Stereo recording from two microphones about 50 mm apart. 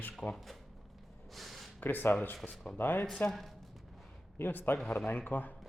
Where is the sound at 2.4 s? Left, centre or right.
Centre.